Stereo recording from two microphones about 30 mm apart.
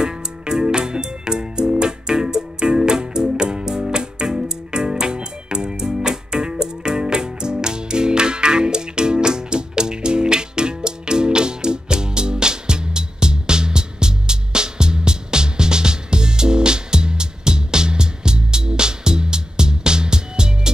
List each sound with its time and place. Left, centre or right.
0.0 s music: right